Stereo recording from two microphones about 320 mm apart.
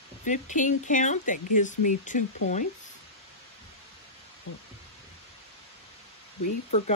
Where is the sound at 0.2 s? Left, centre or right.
Left.